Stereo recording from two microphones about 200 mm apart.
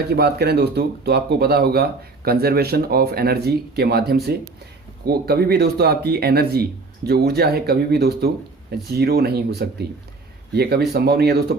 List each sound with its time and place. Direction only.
0.1 s speech: 55° right (ahead or behind)